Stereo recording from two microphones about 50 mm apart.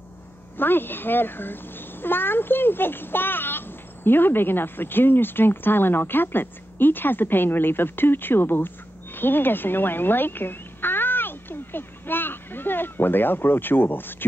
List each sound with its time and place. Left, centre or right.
0.6 s speech: left